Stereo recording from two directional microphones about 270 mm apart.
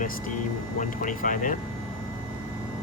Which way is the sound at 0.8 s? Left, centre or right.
Left.